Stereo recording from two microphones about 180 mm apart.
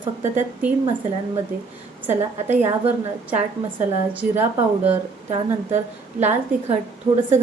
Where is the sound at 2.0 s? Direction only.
10° right (ahead or behind).